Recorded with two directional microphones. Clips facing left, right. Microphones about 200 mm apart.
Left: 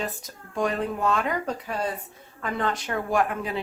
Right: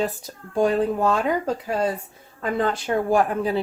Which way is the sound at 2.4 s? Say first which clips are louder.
Right 5 dB; 30° right (ahead or behind).